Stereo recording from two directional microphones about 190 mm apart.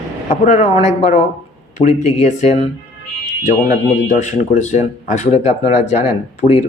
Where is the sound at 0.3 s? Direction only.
35° left (ahead or behind).